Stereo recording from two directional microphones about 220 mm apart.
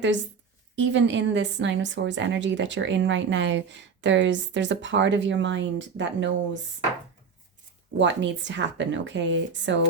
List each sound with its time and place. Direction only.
0.8 s a woman's voice: 55° right (ahead or behind)
7.9 s a woman's voice: 55° right (ahead or behind)